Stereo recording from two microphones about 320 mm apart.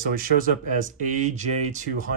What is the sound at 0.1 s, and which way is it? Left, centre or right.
Speech, right.